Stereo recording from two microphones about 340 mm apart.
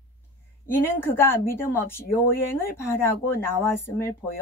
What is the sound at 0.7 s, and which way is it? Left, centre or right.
A woman's voice, centre.